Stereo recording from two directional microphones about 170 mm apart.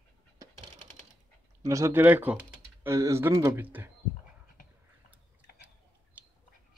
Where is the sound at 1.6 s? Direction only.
20° right (ahead or behind).